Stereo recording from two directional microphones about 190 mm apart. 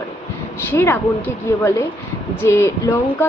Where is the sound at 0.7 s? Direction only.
15° left (ahead or behind).